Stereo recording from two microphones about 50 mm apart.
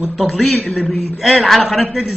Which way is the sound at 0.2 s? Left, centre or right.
Centre.